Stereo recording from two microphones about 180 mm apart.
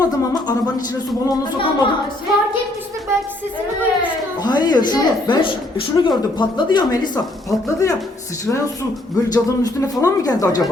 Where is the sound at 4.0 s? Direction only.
25° left (ahead or behind).